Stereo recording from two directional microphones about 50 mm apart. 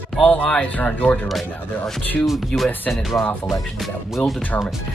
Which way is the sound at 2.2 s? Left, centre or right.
Centre.